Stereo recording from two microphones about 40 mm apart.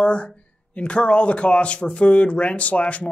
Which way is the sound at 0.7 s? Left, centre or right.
Left.